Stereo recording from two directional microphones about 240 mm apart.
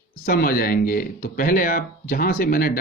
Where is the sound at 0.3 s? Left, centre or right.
Left.